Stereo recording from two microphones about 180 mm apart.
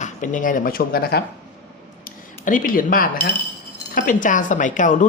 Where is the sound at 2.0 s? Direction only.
50° left (ahead or behind).